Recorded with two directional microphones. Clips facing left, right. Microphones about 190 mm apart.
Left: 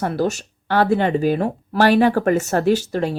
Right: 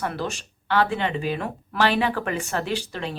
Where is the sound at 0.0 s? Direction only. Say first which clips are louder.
Left 8 dB; 40° left (ahead or behind).